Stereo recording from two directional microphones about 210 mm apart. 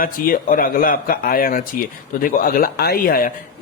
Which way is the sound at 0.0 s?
40° left (ahead or behind).